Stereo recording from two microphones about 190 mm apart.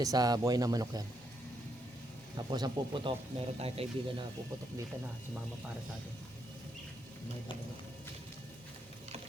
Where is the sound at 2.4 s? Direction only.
20° right (ahead or behind).